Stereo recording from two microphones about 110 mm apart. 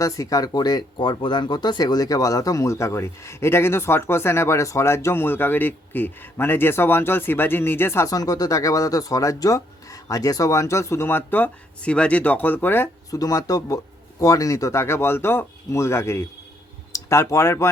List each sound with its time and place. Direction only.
0.0 s speech: 30° left (ahead or behind)
13.1 s speech: 35° left (ahead or behind)